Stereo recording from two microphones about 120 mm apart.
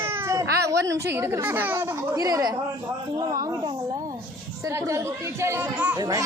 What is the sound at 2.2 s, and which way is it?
A woman's voice, 30° right (ahead or behind).